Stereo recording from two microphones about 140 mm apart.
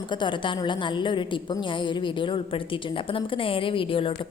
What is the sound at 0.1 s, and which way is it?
A woman's voice, 35° left (ahead or behind).